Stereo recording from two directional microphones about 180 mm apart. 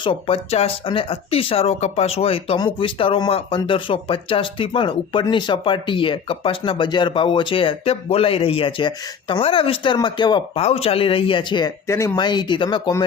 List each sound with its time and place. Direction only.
0.0 s speech: 30° left (ahead or behind)